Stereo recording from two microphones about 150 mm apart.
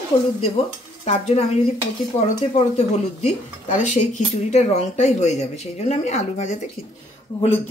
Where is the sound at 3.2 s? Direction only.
45° left (ahead or behind).